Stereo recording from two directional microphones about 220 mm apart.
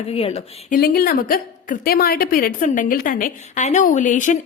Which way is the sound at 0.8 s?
40° left (ahead or behind).